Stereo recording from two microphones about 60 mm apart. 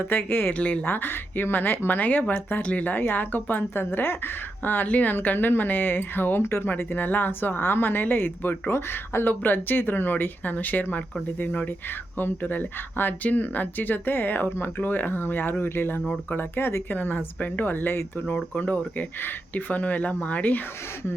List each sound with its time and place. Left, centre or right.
0.0 s speech: left
0.5 s speech: left
0.9 s speech: left